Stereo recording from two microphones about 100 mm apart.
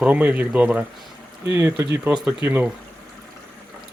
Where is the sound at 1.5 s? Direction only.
25° right (ahead or behind).